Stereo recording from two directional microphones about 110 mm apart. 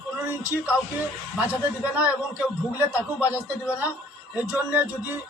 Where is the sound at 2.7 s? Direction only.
25° left (ahead or behind).